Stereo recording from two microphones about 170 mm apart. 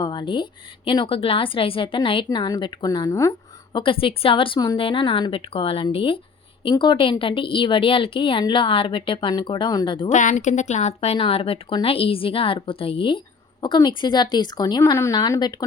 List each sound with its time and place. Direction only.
0.0 s a sound: 25° left (ahead or behind)
0.9 s a woman's voice: 30° left (ahead or behind)
10.1 s speech: 45° left (ahead or behind); by 15.5 s 25° left (ahead or behind)